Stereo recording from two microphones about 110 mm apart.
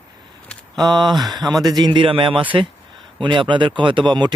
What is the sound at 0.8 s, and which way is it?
Speech, 40° right (ahead or behind).